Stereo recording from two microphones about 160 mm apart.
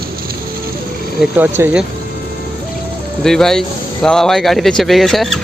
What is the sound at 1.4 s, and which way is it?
Speech, 10° right (ahead or behind).